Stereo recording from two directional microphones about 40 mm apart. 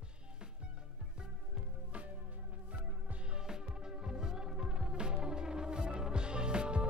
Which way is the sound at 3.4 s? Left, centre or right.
Centre.